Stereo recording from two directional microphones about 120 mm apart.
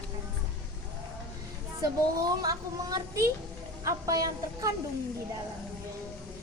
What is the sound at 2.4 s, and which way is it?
Speech, 30° right (ahead or behind).